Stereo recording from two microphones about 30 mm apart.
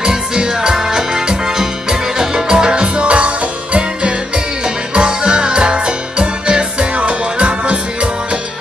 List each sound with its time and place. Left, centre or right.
0.0 s music: right